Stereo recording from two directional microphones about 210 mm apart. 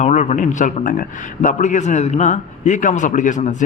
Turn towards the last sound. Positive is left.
turn(degrees=35)  # may be behind; listen again after turning